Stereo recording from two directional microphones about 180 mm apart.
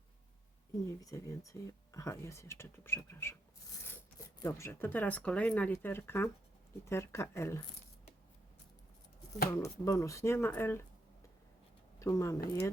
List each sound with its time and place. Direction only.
0.9 s speech: 20° left (ahead or behind)
9.5 s speech: 15° left (ahead or behind)
11.9 s speech: 15° left (ahead or behind)